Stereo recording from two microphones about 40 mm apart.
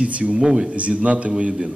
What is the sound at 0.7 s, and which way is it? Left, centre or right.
Speech, right.